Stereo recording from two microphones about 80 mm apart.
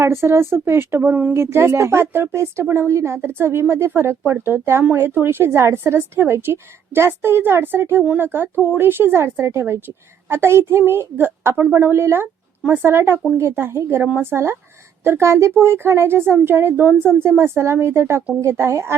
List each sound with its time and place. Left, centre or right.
0.0 s a woman's voice: right